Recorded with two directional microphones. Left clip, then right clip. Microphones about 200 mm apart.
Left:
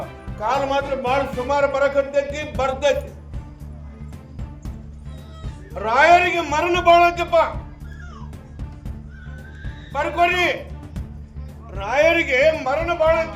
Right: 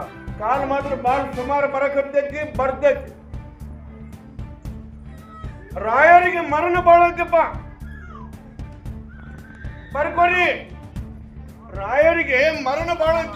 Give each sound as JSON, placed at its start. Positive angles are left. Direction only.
{"t": 0.3, "sound": "a man's voice", "side_deg": 20}
{"t": 2.6, "sound": "a man's voice", "side_deg": 20}
{"t": 5.7, "sound": "a man's voice", "side_deg": 20}
{"t": 9.9, "sound": "a man's voice", "side_deg": 15}
{"t": 11.7, "sound": "a man's voice", "side_deg": 20}
{"t": 12.3, "sound": "a man's voice", "side_deg": 5}